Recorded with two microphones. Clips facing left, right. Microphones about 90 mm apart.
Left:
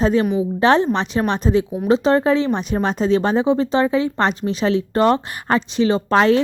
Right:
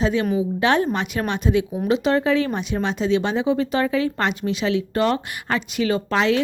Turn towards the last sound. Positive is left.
turn(degrees=35)  # may be behind; listen again after turning